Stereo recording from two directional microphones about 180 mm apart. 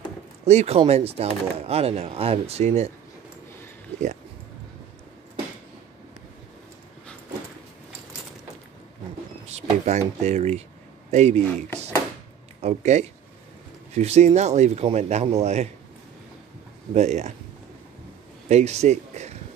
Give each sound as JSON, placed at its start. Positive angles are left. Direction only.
{"t": 0.5, "sound": "speech", "side_deg": -35}
{"t": 9.5, "sound": "speech", "side_deg": -40}
{"t": 12.6, "sound": "speech", "side_deg": -40}
{"t": 16.9, "sound": "speech", "side_deg": -40}
{"t": 18.5, "sound": "speech", "side_deg": -40}